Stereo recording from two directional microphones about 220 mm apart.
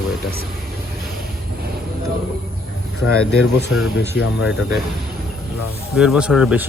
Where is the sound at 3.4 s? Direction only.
50° left (ahead or behind).